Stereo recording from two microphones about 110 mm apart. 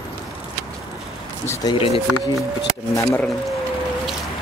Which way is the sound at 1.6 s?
35° left (ahead or behind).